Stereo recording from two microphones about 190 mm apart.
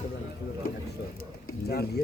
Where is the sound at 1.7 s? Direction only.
55° left (ahead or behind).